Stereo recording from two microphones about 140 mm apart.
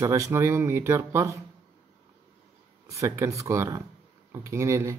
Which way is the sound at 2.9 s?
20° right (ahead or behind).